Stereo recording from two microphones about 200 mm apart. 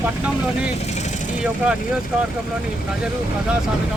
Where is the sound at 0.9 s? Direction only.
35° left (ahead or behind).